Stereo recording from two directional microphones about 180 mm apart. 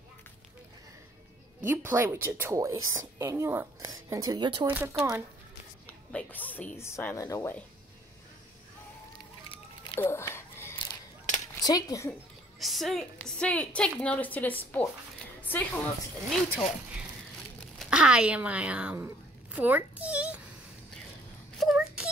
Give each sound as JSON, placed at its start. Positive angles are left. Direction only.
{"t": 1.6, "sound": "a woman's voice", "side_deg": -15}
{"t": 6.1, "sound": "a woman's voice", "side_deg": 10}
{"t": 9.9, "sound": "a sound", "side_deg": 15}
{"t": 11.6, "sound": "speech", "side_deg": 20}
{"t": 12.1, "sound": "a woman's voice", "side_deg": 0}
{"t": 21.5, "sound": "a sound", "side_deg": -5}